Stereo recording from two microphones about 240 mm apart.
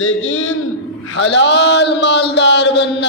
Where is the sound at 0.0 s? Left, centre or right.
Left.